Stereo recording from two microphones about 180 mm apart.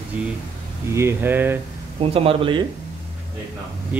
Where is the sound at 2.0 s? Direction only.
30° right (ahead or behind).